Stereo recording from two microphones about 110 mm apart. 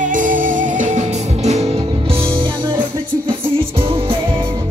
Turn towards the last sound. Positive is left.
turn(degrees=-55)  # may be behind; listen again after turning